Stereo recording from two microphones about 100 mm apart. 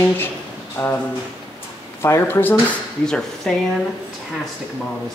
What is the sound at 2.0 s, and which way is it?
Speech, 25° left (ahead or behind).